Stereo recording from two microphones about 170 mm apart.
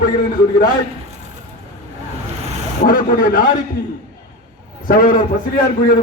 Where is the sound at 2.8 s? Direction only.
55° left (ahead or behind).